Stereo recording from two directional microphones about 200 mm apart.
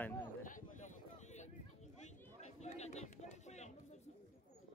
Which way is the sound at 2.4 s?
35° left (ahead or behind).